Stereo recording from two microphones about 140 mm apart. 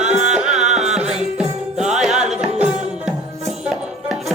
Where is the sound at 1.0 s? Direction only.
5° right (ahead or behind).